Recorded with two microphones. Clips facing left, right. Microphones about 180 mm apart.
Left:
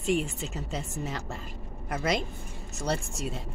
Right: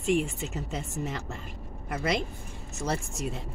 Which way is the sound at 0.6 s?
35° left (ahead or behind).